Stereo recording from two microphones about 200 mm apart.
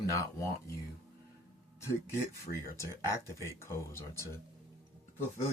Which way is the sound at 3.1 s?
15° left (ahead or behind).